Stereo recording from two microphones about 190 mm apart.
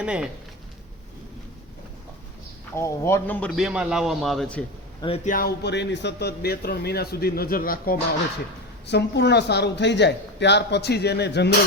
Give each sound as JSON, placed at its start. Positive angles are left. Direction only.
{"t": 0.0, "sound": "a man's voice", "side_deg": -5}
{"t": 2.7, "sound": "a man's voice", "side_deg": 15}
{"t": 4.9, "sound": "speech", "side_deg": 30}
{"t": 5.2, "sound": "a man's voice", "side_deg": 50}
{"t": 8.9, "sound": "a man's voice", "side_deg": 65}